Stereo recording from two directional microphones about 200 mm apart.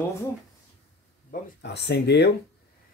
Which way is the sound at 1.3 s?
55° left (ahead or behind).